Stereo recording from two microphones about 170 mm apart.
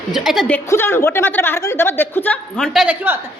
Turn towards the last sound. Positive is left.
turn(degrees=-5)  # may be behind; listen again after turning